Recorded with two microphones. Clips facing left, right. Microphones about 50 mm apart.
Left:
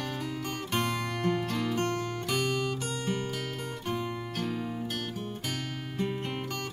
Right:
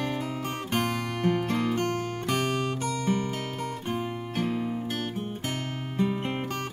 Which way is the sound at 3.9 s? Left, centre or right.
Right.